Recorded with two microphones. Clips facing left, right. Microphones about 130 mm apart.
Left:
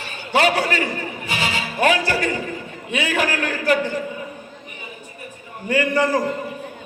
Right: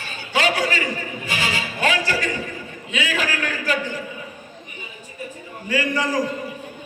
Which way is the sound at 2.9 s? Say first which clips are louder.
Left 3 dB; 55° left (ahead or behind).